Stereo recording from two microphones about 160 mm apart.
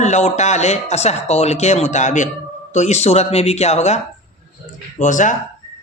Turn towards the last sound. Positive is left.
turn(degrees=50)  # may be behind; listen again after turning